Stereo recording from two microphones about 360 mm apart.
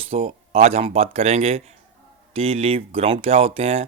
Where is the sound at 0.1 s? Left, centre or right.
Centre.